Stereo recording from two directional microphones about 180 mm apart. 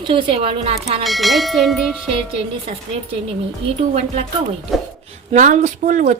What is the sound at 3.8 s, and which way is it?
Speech, 35° right (ahead or behind).